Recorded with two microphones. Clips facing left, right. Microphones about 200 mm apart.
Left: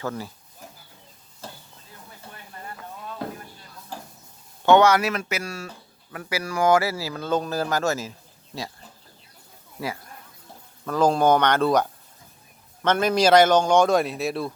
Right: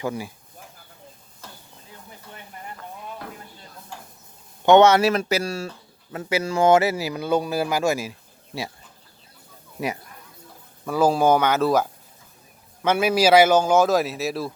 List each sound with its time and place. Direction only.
0.0 s speech: 10° right (ahead or behind)
1.4 s a sound: 30° left (ahead or behind)
1.9 s a sound: 20° right (ahead or behind)
3.9 s stir: 35° left (ahead or behind)
4.6 s speech: 20° right (ahead or behind)
9.8 s a man's voice: 15° right (ahead or behind); by 14.5 s centre (ahead or behind)